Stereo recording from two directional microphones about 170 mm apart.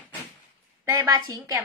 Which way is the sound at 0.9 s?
20° right (ahead or behind).